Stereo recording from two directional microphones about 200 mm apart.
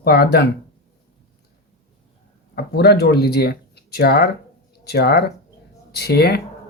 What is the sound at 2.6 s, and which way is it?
Speech, 55° left (ahead or behind).